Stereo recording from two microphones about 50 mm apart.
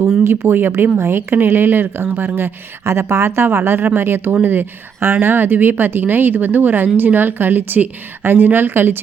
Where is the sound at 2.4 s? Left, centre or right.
Right.